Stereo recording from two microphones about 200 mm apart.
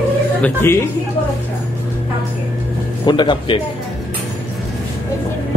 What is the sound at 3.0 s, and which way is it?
Speech, 25° left (ahead or behind).